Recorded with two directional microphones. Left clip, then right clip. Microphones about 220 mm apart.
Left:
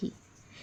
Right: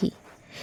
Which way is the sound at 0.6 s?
45° right (ahead or behind).